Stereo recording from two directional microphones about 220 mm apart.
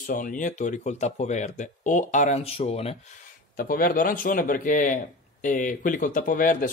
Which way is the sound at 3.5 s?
40° left (ahead or behind).